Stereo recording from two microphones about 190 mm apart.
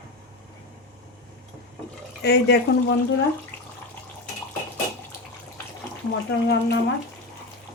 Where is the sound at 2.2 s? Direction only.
60° left (ahead or behind).